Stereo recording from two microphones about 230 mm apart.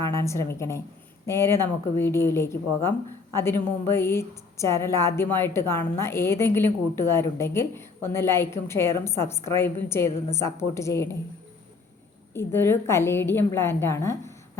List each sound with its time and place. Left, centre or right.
0.1 s a woman's voice: centre
12.3 s a woman's voice: centre